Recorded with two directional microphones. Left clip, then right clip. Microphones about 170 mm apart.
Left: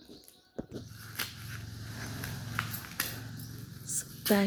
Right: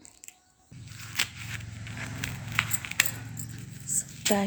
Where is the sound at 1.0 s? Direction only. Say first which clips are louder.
Right 9 dB; 25° right (ahead or behind).